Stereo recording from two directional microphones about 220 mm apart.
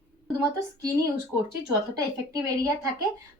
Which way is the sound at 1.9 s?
15° right (ahead or behind).